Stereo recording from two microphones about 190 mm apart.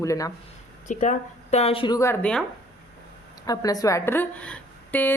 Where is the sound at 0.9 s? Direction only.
40° left (ahead or behind); by 2.4 s 5° left (ahead or behind).